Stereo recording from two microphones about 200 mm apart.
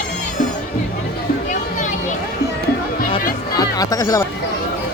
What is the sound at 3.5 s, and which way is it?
Music, 20° left (ahead or behind).